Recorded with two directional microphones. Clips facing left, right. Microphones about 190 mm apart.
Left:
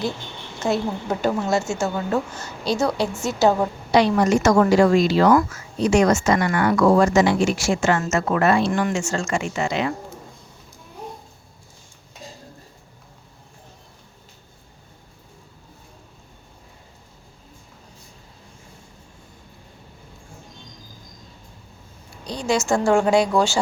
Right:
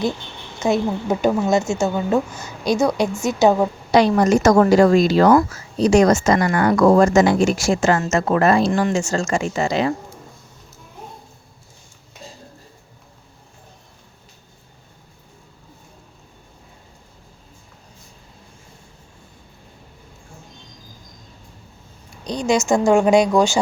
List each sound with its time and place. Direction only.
0.6 s a woman's voice: 15° right (ahead or behind)
3.9 s speech: 45° right (ahead or behind)
22.2 s a woman's voice: 20° right (ahead or behind)